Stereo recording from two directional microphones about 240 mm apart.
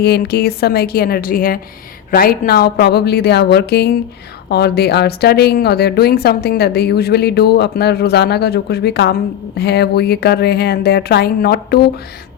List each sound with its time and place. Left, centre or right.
0.0 s a woman's voice: left